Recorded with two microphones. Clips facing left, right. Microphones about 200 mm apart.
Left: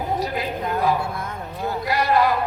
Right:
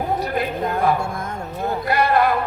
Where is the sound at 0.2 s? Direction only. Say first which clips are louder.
Right 3 dB; 55° right (ahead or behind).